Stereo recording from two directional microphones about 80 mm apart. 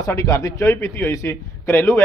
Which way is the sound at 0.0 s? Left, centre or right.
Left.